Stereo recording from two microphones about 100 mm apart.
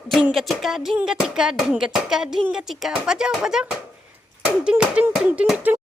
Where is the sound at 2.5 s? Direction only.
5° right (ahead or behind).